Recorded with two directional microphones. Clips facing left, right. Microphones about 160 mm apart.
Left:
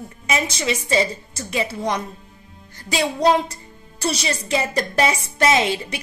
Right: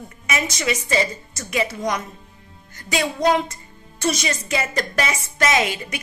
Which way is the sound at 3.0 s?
35° left (ahead or behind).